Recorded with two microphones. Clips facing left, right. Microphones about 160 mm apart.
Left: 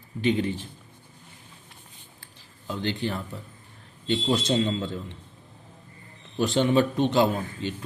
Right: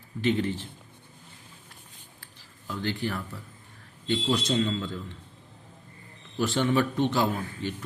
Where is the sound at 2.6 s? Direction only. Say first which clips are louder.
Left 2 dB; 20° left (ahead or behind).